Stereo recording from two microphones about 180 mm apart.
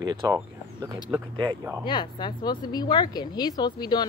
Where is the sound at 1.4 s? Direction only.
25° right (ahead or behind).